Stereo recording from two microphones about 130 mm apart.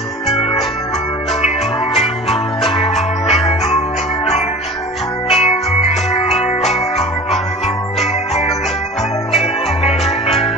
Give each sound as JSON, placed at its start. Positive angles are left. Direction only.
{"t": 5.3, "sound": "music", "side_deg": 50}